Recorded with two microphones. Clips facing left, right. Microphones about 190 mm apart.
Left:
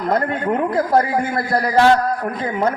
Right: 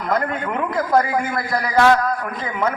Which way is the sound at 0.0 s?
35° left (ahead or behind).